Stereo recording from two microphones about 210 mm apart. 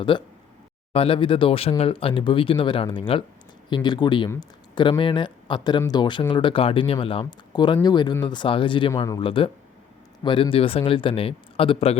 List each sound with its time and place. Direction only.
0.0 s speech: 25° left (ahead or behind)